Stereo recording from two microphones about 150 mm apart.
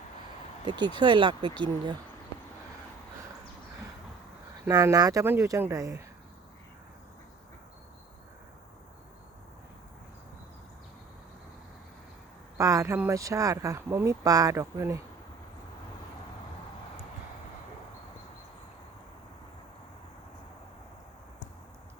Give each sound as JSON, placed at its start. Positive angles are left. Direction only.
{"t": 0.6, "sound": "speech", "side_deg": -30}
{"t": 4.7, "sound": "speech", "side_deg": -20}
{"t": 12.5, "sound": "speech", "side_deg": -20}